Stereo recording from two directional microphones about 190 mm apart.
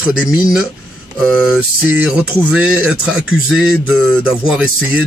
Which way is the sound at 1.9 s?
5° right (ahead or behind).